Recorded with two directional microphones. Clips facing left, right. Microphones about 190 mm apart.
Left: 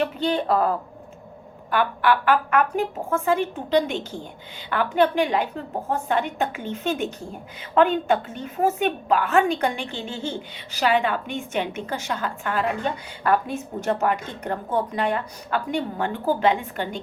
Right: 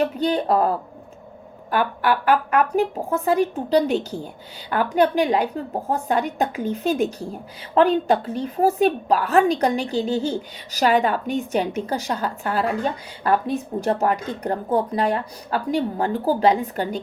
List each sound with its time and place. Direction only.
0.0 s a woman's voice: 40° right (ahead or behind)
1.7 s a woman's voice: 40° right (ahead or behind)